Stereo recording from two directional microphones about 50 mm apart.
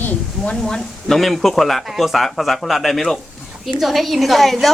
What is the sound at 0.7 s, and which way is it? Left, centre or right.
Speech, centre.